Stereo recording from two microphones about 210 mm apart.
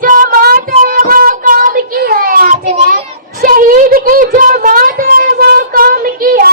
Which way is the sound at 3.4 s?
40° right (ahead or behind).